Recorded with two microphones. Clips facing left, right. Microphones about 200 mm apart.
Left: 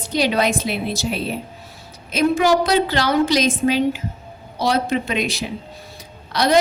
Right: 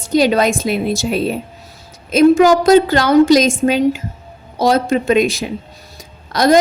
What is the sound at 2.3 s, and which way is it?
A woman's voice, 45° right (ahead or behind).